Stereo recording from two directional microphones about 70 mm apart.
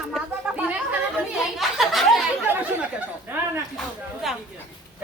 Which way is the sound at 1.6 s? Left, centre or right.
Centre.